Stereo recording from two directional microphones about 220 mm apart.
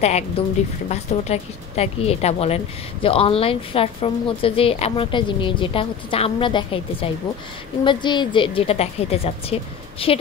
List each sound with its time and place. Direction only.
0.4 s a woman's voice: 25° left (ahead or behind)